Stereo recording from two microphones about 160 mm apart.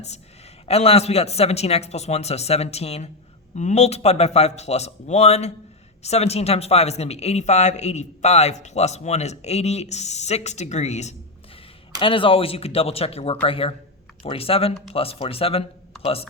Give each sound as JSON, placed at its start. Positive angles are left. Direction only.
{"t": 0.7, "sound": "a man's voice", "side_deg": 40}
{"t": 11.9, "sound": "a man's voice", "side_deg": 35}